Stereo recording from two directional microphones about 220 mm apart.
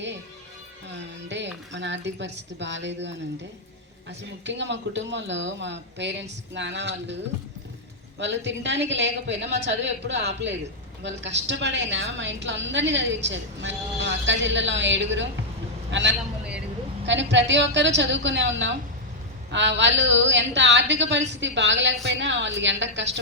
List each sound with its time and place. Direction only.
1.3 s speech: 55° right (ahead or behind)
4.4 s speech: 55° right (ahead or behind)
8.2 s a woman's voice: 55° right (ahead or behind)